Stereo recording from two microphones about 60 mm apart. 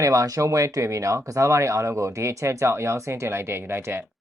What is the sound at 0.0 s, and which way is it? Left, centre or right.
Speech, right.